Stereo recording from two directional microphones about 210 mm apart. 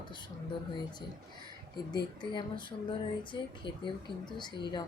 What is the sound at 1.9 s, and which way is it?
Speech, 20° left (ahead or behind).